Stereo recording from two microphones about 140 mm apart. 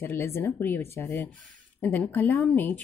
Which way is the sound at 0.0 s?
15° left (ahead or behind).